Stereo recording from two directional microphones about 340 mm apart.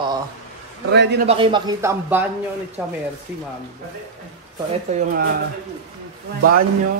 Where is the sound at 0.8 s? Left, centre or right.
Right.